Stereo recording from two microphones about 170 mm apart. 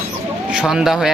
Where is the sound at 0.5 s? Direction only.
5° right (ahead or behind).